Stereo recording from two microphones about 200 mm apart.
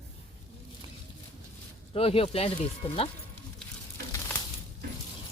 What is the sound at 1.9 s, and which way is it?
Speech, 30° left (ahead or behind).